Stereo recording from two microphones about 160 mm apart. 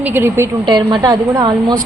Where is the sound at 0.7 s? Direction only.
30° right (ahead or behind).